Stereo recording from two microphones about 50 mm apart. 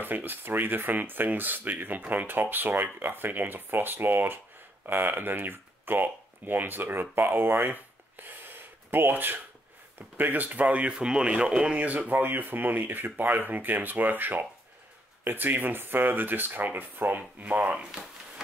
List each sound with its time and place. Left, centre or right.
0.0 s speech: right; by 11.8 s centre
11.8 s speech: right